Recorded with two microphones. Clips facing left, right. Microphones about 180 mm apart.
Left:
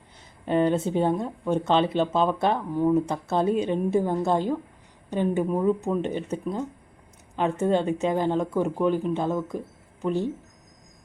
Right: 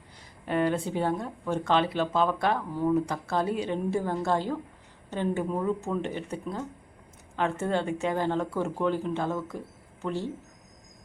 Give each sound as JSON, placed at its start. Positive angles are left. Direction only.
{"t": 0.4, "sound": "speech", "side_deg": 20}